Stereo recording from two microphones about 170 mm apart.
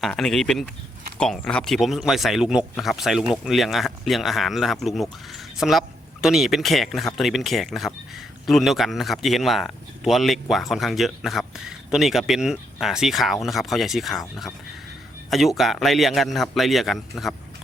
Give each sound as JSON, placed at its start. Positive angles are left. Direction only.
{"t": 0.0, "sound": "speech", "side_deg": 5}